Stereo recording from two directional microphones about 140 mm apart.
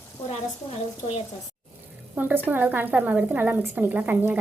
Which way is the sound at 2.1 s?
15° right (ahead or behind).